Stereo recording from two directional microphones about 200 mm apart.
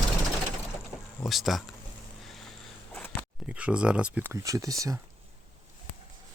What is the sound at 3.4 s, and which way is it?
Speech, 5° right (ahead or behind).